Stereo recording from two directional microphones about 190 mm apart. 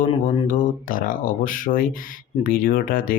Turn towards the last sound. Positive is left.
turn(degrees=45)  # may be behind; listen again after turning